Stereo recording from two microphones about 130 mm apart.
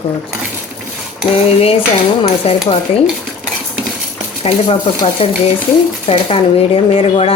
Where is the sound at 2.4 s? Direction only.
50° left (ahead or behind).